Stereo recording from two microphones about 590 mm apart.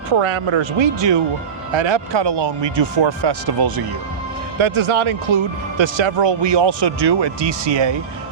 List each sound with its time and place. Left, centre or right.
0.1 s speech: right
4.5 s speech: right